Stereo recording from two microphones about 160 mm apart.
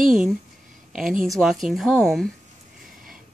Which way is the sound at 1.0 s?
55° right (ahead or behind).